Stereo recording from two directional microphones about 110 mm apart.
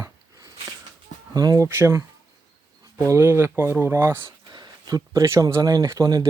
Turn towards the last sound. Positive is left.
turn(degrees=-30)  # may be behind; listen again after turning